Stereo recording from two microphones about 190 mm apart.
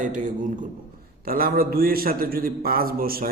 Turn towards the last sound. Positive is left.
turn(degrees=-50)  # may be behind; listen again after turning